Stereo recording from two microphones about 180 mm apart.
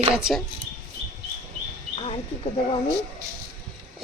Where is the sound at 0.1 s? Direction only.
5° right (ahead or behind).